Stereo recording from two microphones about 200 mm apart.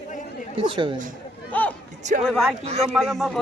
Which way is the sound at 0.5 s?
25° right (ahead or behind).